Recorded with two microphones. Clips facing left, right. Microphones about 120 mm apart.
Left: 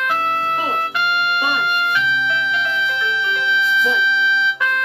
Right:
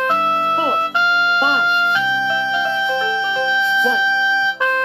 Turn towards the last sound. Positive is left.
turn(degrees=-30)  # may be behind; listen again after turning